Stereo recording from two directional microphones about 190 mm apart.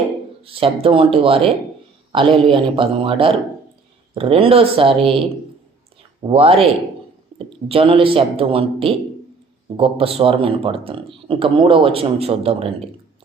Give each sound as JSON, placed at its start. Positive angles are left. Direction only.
{"t": 0.4, "sound": "speech", "side_deg": -30}